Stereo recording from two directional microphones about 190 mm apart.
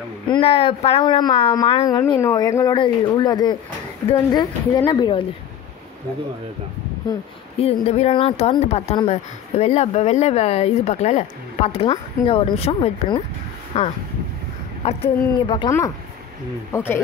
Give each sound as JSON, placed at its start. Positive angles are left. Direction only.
{"t": 0.3, "sound": "a woman's voice", "side_deg": 30}
{"t": 7.5, "sound": "a woman's voice", "side_deg": 30}
{"t": 16.7, "sound": "speech", "side_deg": 15}